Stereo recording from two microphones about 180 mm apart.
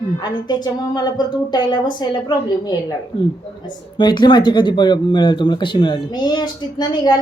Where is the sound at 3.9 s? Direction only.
25° left (ahead or behind).